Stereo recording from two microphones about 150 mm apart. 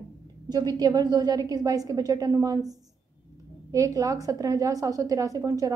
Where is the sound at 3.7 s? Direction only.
20° right (ahead or behind).